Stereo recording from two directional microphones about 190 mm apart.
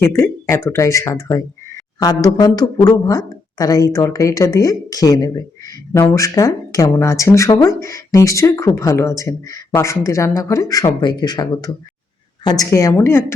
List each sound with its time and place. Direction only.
0.0 s speech: 15° left (ahead or behind)